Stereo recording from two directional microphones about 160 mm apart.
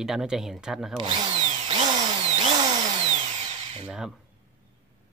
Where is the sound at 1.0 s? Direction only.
35° right (ahead or behind).